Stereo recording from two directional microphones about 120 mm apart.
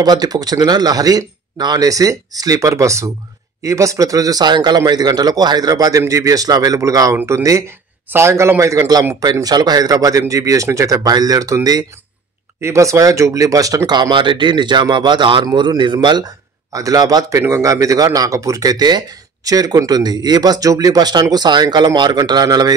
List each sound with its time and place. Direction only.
0.0 s speech: 35° right (ahead or behind)